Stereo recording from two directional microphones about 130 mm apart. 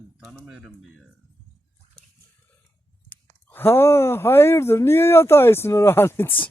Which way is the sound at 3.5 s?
15° left (ahead or behind).